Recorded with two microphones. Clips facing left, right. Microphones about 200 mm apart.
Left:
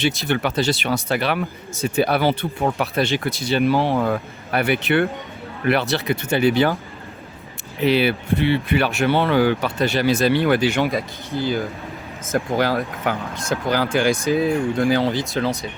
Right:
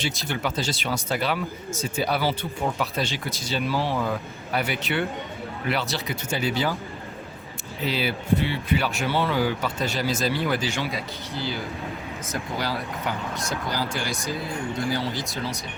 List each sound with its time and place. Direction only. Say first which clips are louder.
0.3 s speech: left 5 dB; 65° left (ahead or behind)
7.8 s speech: left 9 dB; 65° left (ahead or behind)